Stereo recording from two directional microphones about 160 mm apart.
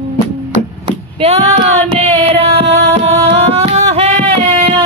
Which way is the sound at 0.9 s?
35° right (ahead or behind).